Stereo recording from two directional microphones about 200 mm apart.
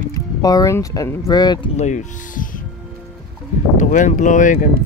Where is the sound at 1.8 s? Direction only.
35° left (ahead or behind).